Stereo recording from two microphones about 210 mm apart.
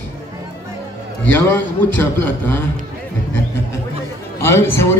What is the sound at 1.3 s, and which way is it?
Speech, 10° left (ahead or behind).